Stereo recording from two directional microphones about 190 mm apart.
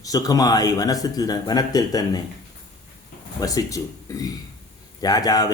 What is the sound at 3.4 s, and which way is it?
Speech, 20° left (ahead or behind).